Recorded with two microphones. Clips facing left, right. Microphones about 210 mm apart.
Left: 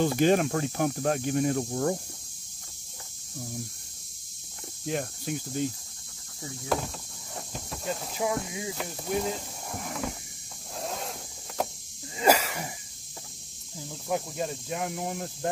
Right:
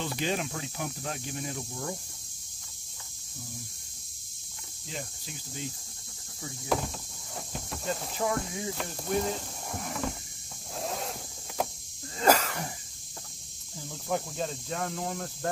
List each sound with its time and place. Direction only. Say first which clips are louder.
0.0 s speech: left 9 dB; 50° left (ahead or behind)
4.8 s cricket: left 10 dB; 60° left (ahead or behind)
6.7 s a sound: even; centre (ahead or behind)
7.5 s speech: even; centre (ahead or behind)
10.8 s a sound: even; centre (ahead or behind)
12.2 s wheeze: left 1 dB; 10° left (ahead or behind)
13.7 s speech: left 1 dB; 10° left (ahead or behind)